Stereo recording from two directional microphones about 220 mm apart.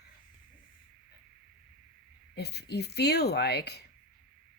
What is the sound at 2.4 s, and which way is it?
Speech, 50° left (ahead or behind).